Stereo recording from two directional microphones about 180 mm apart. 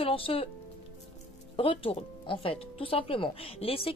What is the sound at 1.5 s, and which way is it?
A woman's voice, 30° left (ahead or behind).